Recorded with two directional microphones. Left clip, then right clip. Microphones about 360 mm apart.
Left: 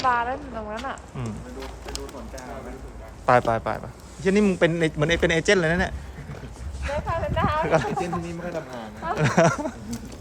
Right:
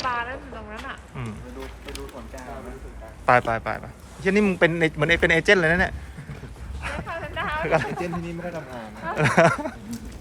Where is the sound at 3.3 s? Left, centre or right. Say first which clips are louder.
Even; centre.